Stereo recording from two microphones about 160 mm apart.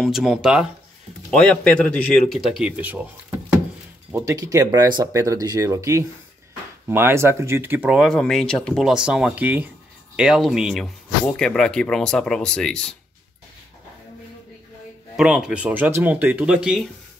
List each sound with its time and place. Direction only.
0.0 s speech: centre (ahead or behind)
4.1 s speech: 20° right (ahead or behind); by 12.9 s 5° left (ahead or behind)
15.1 s speech: 5° right (ahead or behind)